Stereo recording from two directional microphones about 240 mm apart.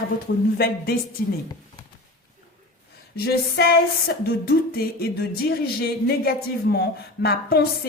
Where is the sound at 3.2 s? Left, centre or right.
Left.